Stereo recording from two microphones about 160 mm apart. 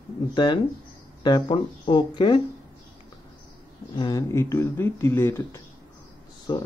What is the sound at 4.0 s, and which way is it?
Speech, 20° left (ahead or behind).